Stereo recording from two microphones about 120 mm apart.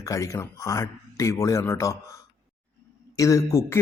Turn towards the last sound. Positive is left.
turn(degrees=25)  # may be behind; listen again after turning